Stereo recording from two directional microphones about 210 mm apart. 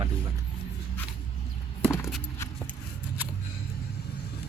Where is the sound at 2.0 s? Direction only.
Centre (ahead or behind).